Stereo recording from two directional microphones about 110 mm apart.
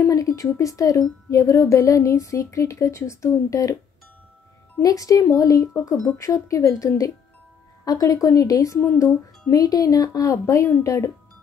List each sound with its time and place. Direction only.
0.0 s speech: 30° left (ahead or behind)
4.8 s speech: 30° left (ahead or behind)